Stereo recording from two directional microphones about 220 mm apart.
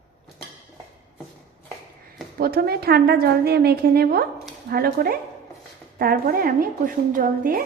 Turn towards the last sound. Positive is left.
turn(degrees=-40)  # may be behind; listen again after turning